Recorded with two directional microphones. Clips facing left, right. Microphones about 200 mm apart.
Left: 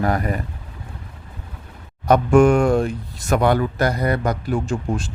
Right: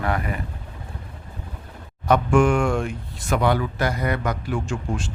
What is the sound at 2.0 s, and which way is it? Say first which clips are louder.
Speech: left 4 dB; 40° left (ahead or behind).